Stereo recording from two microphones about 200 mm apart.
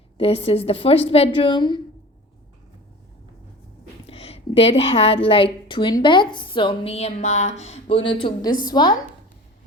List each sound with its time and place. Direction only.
0.2 s a woman's voice: 30° left (ahead or behind)
4.0 s a woman's voice: 30° left (ahead or behind)